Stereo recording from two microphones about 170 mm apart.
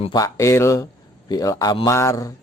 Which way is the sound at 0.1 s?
20° left (ahead or behind).